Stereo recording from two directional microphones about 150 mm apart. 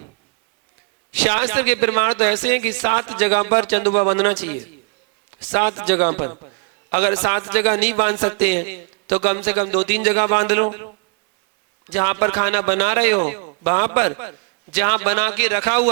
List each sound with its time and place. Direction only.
1.1 s a man's voice: 15° left (ahead or behind)
5.8 s a man's voice: 20° left (ahead or behind)
11.9 s a man's voice: 20° left (ahead or behind)